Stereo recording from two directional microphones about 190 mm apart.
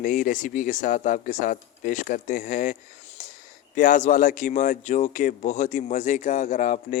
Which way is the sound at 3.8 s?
40° left (ahead or behind).